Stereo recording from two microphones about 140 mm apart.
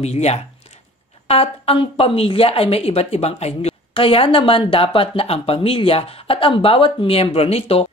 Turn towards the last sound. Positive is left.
turn(degrees=45)  # may be behind; listen again after turning